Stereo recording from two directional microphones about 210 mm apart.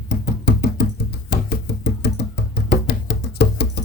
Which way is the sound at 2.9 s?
55° left (ahead or behind).